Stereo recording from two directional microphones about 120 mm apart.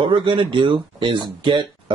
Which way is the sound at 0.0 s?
45° right (ahead or behind).